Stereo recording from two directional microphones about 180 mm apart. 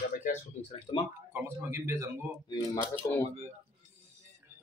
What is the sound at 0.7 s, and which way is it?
Speech, 30° left (ahead or behind).